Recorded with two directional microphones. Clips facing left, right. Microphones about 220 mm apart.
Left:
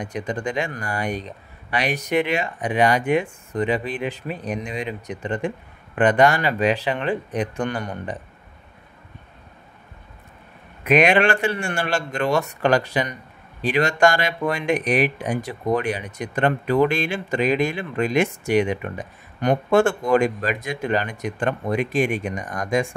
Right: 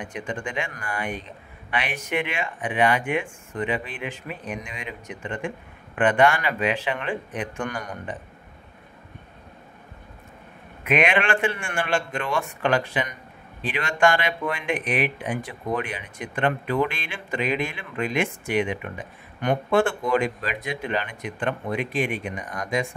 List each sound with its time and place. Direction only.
0.0 s speech: 40° left (ahead or behind)
10.8 s speech: 40° left (ahead or behind)